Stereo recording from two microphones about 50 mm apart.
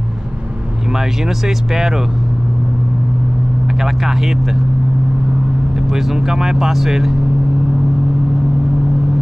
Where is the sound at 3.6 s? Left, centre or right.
Centre.